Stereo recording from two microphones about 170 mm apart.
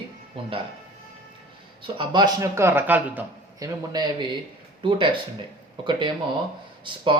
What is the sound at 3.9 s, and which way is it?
Speech, 25° right (ahead or behind).